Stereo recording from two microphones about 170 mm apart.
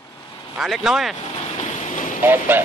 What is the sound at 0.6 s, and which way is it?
Speech, 5° right (ahead or behind).